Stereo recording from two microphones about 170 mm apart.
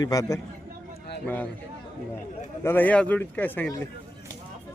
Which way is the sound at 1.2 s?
10° left (ahead or behind).